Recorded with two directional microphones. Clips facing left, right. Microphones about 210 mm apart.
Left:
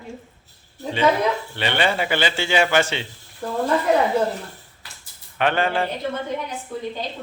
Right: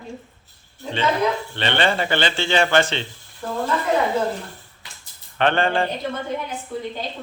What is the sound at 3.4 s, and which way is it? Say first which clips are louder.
Speech: left 1 dB; 35° left (ahead or behind).